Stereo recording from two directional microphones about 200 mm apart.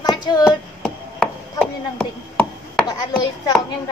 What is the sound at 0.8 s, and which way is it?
Chopping, 5° left (ahead or behind).